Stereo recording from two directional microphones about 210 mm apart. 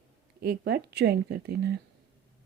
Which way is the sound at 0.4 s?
50° right (ahead or behind).